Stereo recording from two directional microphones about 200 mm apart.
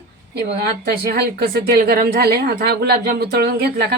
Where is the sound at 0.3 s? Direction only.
55° right (ahead or behind).